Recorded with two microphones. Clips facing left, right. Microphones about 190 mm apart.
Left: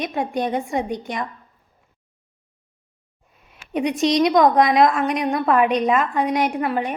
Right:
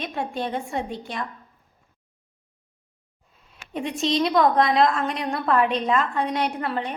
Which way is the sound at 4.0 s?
20° left (ahead or behind).